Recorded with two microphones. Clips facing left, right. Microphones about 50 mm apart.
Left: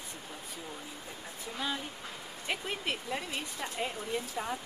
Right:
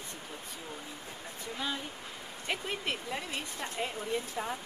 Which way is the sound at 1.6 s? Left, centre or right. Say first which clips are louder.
Left 1 dB; centre.